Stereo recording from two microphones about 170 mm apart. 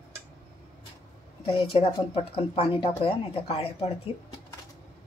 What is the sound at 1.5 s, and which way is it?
A woman's voice, 35° left (ahead or behind).